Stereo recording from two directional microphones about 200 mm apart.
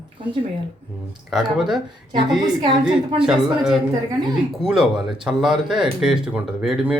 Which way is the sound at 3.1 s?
5° right (ahead or behind).